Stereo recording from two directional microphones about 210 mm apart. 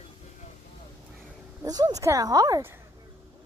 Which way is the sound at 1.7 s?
20° right (ahead or behind).